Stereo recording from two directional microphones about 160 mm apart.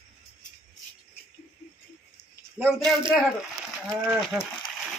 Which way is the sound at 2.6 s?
Centre (ahead or behind).